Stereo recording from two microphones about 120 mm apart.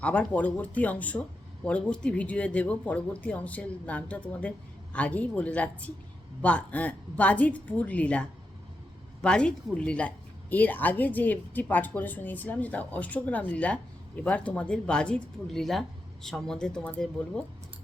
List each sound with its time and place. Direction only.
0.0 s a woman's voice: 10° left (ahead or behind)